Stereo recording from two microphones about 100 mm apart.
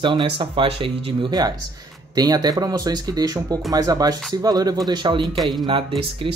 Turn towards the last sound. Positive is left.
turn(degrees=-60)  # may be behind; listen again after turning